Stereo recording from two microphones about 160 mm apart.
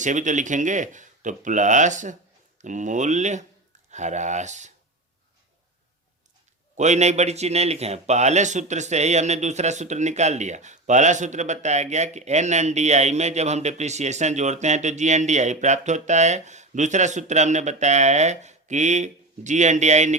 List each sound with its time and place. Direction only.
0.0 s speech: 50° right (ahead or behind)
6.7 s speech: 45° right (ahead or behind)